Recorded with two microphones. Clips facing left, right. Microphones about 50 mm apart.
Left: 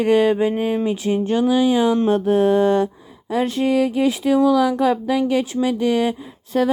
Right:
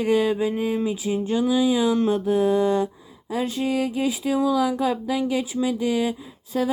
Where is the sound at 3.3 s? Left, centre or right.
Left.